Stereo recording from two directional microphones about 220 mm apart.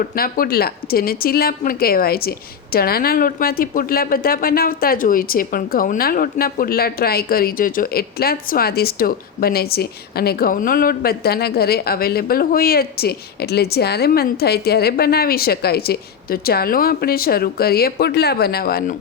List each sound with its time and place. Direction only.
0.2 s speech: 40° left (ahead or behind)